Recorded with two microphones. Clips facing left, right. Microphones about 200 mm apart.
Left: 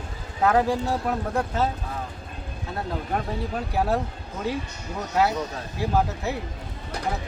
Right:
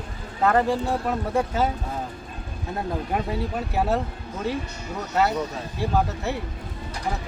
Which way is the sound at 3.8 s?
Centre (ahead or behind).